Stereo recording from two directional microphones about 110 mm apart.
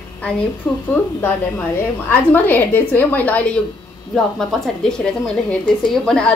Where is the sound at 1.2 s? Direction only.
15° left (ahead or behind).